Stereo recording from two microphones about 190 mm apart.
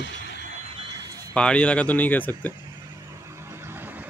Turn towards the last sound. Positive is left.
turn(degrees=-10)  # may be behind; listen again after turning